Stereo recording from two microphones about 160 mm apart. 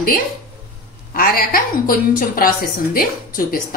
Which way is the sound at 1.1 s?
65° left (ahead or behind).